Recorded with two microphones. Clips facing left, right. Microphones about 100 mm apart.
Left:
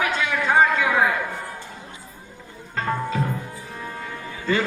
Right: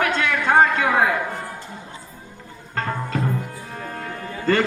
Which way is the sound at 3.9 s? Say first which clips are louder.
Right 3 dB; 55° right (ahead or behind).